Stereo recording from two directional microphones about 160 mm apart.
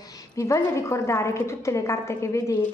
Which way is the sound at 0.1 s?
20° left (ahead or behind).